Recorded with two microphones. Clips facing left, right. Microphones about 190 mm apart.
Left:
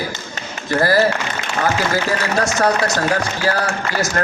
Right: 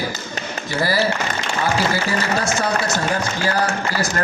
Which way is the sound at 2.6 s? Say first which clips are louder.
Left 4 dB; 65° left (ahead or behind).